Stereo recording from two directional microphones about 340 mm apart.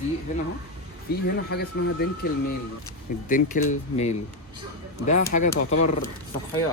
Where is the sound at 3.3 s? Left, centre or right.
Left.